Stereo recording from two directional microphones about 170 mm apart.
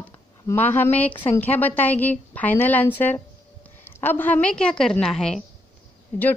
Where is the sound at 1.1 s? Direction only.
30° left (ahead or behind).